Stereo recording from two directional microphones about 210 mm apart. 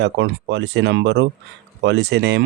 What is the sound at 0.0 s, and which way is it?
Speech, 55° right (ahead or behind).